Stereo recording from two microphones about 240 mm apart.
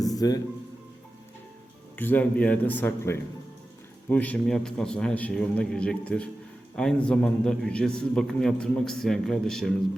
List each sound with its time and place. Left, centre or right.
0.1 s music: centre
2.0 s a man's voice: centre